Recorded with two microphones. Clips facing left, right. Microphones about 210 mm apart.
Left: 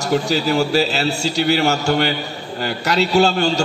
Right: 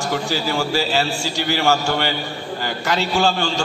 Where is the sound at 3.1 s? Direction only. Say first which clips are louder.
Left 6 dB; 40° left (ahead or behind).